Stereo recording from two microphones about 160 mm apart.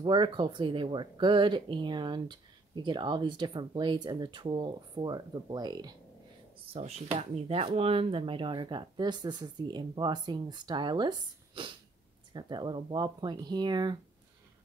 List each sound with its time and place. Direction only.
0.0 s speech: 30° right (ahead or behind)
6.7 s speech: 40° right (ahead or behind)